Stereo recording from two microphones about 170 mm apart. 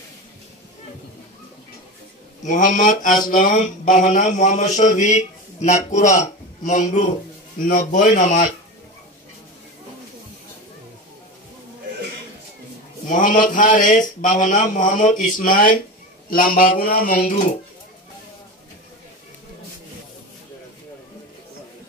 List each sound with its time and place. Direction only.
2.4 s mantra: 50° left (ahead or behind)
13.1 s mantra: 50° left (ahead or behind)
16.3 s a woman's voice: 55° left (ahead or behind)
17.0 s mantra: 55° left (ahead or behind)